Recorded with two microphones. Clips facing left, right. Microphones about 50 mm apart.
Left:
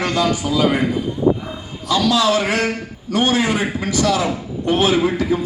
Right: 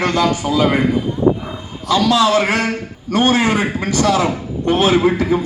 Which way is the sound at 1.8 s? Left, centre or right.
Right.